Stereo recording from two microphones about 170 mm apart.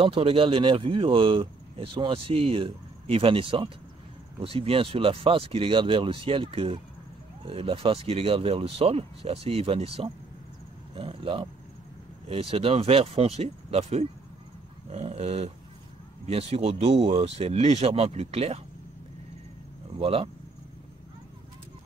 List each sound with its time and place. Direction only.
0.0 s speech: 35° right (ahead or behind)
20.0 s speech: 35° right (ahead or behind)